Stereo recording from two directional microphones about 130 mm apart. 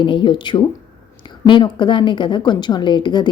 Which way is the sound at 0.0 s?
40° left (ahead or behind).